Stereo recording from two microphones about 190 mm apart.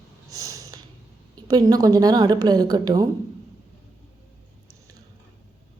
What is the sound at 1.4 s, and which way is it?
A woman's voice, 20° right (ahead or behind).